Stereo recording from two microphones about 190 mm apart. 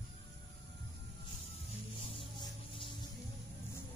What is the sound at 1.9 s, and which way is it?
Music, 30° left (ahead or behind).